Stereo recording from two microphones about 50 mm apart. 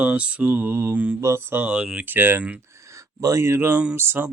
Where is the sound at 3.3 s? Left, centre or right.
Right.